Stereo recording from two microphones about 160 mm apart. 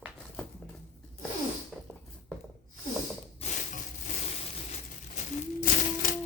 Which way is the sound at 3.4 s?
50° left (ahead or behind).